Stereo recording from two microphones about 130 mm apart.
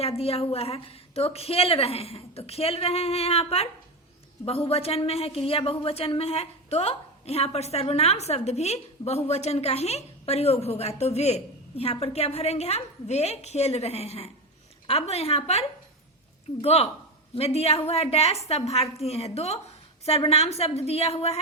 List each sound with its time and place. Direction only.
0.0 s a woman's voice: 50° left (ahead or behind)